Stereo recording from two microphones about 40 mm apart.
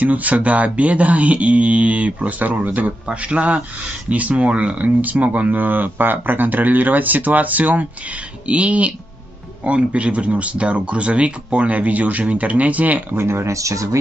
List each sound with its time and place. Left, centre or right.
0.0 s speech: right
3.1 s speech: right
8.5 s speech: right